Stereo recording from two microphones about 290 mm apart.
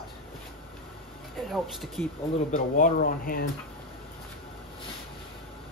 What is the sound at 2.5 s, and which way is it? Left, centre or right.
Speech, left.